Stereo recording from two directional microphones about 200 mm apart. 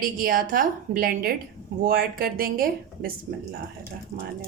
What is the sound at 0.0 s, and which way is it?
A woman's voice, 45° right (ahead or behind).